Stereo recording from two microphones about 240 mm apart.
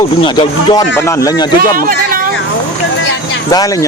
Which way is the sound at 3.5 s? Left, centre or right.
Centre.